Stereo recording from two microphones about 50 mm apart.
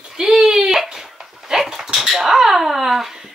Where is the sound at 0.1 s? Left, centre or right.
Centre.